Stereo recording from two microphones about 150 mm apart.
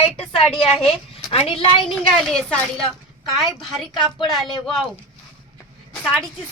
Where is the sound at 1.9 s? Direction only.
Centre (ahead or behind).